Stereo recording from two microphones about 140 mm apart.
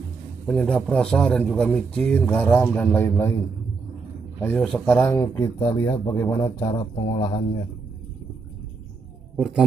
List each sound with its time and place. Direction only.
0.5 s a man's voice: 5° left (ahead or behind)
4.4 s a man's voice: 15° left (ahead or behind)
6.4 s speech: 35° left (ahead or behind)
7.0 s a man's voice: 50° left (ahead or behind)